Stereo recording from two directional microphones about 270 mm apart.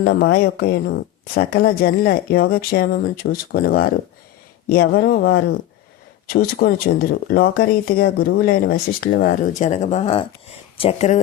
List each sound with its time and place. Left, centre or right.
0.0 s speech: left